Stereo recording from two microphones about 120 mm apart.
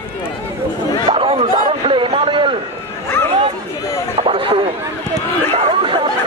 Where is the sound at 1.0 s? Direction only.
50° right (ahead or behind).